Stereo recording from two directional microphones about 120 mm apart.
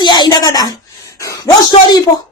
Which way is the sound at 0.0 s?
35° left (ahead or behind).